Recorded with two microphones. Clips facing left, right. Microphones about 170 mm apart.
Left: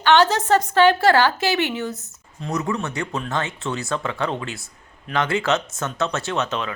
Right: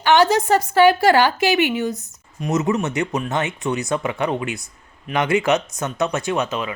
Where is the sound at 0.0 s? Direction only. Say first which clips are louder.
Right 1 dB; 10° right (ahead or behind).